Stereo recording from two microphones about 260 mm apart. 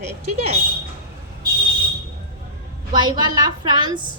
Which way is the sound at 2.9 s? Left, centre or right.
Centre.